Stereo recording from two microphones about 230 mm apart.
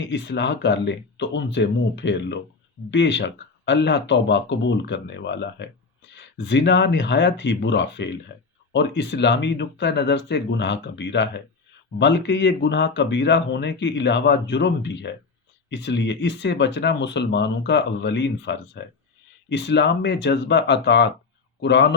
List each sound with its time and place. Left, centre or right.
0.0 s speech: left